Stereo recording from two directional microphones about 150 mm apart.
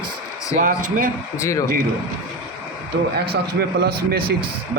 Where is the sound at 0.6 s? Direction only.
60° right (ahead or behind).